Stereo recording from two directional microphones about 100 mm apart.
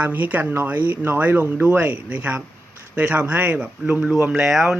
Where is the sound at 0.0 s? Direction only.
15° right (ahead or behind).